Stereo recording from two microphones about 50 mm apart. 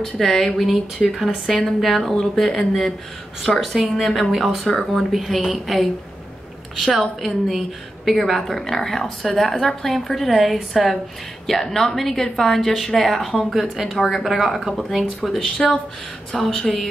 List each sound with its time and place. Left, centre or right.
0.0 s speech: centre
0.9 s speech: centre
5.1 s speech: centre
15.5 s speech: left
16.3 s speech: centre